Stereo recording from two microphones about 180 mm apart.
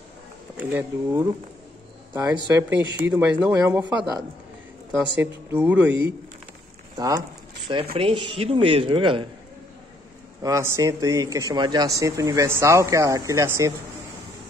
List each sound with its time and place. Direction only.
0.6 s speech: 10° right (ahead or behind)
2.7 s speech: 10° right (ahead or behind)
4.9 s speech: 5° right (ahead or behind)
7.0 s speech: 20° right (ahead or behind)
10.4 s speech: 15° right (ahead or behind)